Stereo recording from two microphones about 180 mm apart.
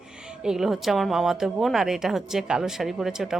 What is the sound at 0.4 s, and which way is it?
A woman's voice, centre (ahead or behind).